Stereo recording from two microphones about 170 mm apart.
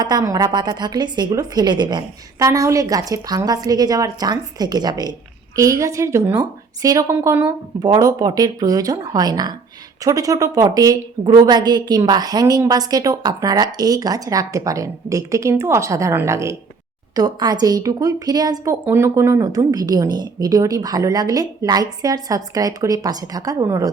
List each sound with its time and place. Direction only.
0.0 s a woman's voice: 25° right (ahead or behind)